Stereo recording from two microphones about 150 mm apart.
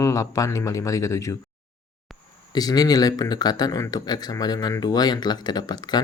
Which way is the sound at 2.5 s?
25° left (ahead or behind).